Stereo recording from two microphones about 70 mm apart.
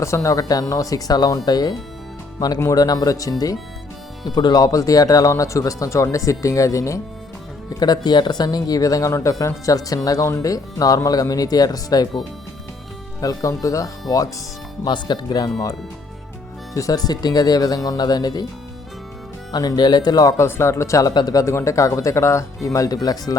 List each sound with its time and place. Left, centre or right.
0.0 s speech: left
2.7 s speech: left
4.4 s speech: left
7.8 s speech: left
13.2 s speech: left
14.8 s speech: left
16.7 s speech: left
19.5 s speech: left
20.3 s speech: left
21.1 s speech: left
21.3 s speech: left